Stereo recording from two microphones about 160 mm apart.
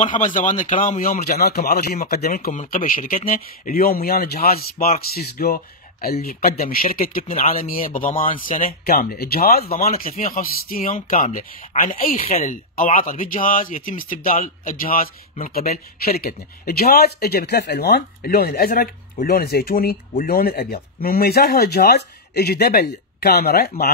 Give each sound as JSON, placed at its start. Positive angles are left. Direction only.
{"t": 0.0, "sound": "a man's voice", "side_deg": 55}
{"t": 2.2, "sound": "a man's voice", "side_deg": 55}
{"t": 12.2, "sound": "speech", "side_deg": 40}
{"t": 12.4, "sound": "a man's voice", "side_deg": 55}